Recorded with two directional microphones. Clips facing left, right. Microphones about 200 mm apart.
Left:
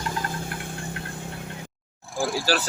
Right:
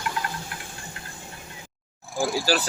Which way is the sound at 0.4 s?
55° left (ahead or behind).